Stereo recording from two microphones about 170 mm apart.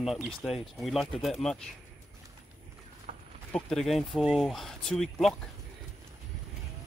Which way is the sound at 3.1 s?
40° right (ahead or behind).